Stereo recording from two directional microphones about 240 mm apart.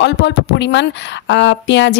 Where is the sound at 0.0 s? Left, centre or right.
Left.